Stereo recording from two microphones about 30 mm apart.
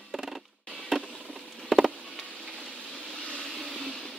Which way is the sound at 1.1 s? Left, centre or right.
Centre.